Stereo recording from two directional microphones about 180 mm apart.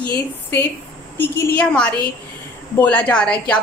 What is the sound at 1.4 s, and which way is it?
A woman's voice, 5° left (ahead or behind).